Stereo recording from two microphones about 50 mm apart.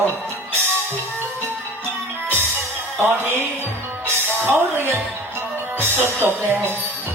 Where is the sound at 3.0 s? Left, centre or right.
Right.